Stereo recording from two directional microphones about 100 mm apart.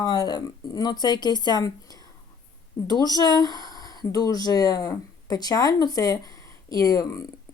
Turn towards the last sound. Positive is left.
turn(degrees=35)  # may be behind; listen again after turning